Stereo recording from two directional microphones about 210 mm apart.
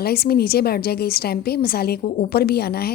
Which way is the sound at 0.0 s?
45° left (ahead or behind).